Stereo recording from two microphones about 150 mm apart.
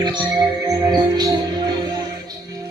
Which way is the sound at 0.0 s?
30° right (ahead or behind).